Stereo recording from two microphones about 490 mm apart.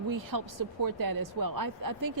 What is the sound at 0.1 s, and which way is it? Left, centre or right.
A woman's voice, right.